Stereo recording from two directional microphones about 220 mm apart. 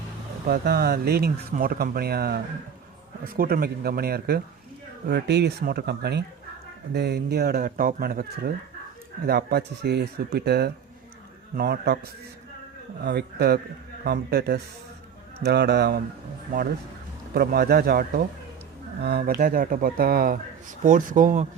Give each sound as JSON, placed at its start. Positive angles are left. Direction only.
{"t": 0.4, "sound": "speech", "side_deg": -45}
{"t": 17.3, "sound": "speech", "side_deg": -45}